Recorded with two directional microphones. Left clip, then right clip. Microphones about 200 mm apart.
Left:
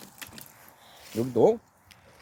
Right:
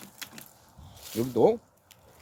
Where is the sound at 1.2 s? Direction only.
40° left (ahead or behind).